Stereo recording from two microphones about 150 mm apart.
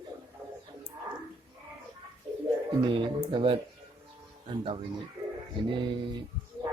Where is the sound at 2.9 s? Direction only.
30° right (ahead or behind).